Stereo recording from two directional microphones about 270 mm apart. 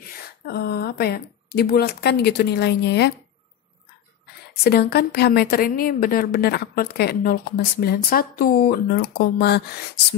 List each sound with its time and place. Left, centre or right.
0.5 s a woman's voice: left
4.6 s a woman's voice: left